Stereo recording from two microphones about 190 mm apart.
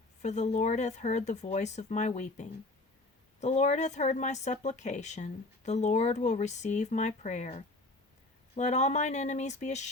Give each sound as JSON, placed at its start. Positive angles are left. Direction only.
{"t": 0.2, "sound": "speech", "side_deg": 40}